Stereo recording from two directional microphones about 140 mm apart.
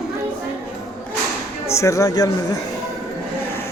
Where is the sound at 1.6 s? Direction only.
20° left (ahead or behind).